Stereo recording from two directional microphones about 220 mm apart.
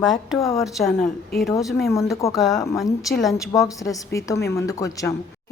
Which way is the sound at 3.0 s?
Centre (ahead or behind).